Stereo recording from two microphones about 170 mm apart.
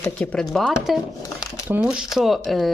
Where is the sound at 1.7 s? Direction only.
5° right (ahead or behind).